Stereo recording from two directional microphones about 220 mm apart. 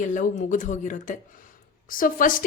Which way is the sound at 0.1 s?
35° left (ahead or behind).